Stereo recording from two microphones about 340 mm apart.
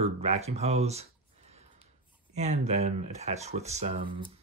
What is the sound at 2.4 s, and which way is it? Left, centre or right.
Speech, centre.